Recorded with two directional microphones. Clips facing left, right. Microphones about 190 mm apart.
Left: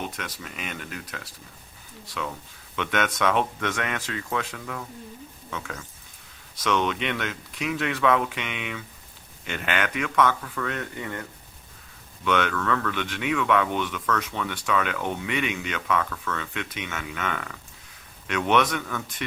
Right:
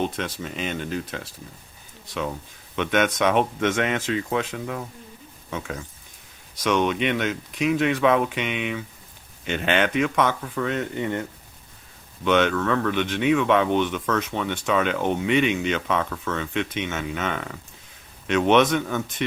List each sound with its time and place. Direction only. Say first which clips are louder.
0.0 s speech: right 7 dB; 30° right (ahead or behind)
2.7 s speech: right 5 dB; 20° right (ahead or behind)